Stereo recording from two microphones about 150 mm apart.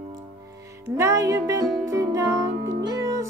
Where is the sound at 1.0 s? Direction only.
20° right (ahead or behind).